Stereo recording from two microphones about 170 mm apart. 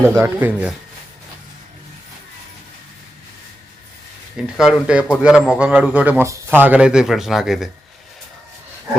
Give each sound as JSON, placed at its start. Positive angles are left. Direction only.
{"t": 0.0, "sound": "speech", "side_deg": -15}
{"t": 4.5, "sound": "a man's voice", "side_deg": -5}